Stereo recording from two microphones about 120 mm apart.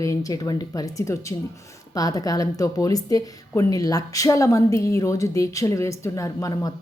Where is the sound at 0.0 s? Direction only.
30° left (ahead or behind).